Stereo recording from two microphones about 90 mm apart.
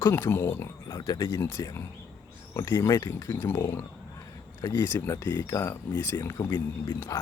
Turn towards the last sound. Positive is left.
turn(degrees=40)  # may be behind; listen again after turning